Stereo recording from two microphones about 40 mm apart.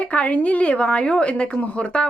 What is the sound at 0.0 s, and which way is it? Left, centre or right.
A woman's voice, left.